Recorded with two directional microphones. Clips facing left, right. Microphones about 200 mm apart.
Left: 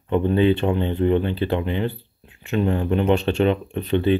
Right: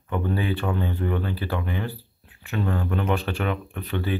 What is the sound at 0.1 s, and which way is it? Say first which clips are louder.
Speech: left 8 dB; 20° left (ahead or behind).